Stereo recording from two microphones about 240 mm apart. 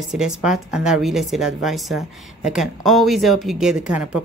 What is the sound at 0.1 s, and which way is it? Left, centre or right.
A woman's voice, centre.